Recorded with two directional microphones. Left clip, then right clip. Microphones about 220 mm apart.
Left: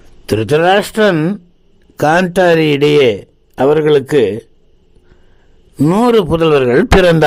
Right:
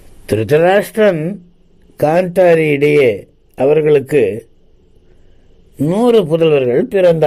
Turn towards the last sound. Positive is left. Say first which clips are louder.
# left 2 dB
turn(degrees=25)  # may be behind; listen again after turning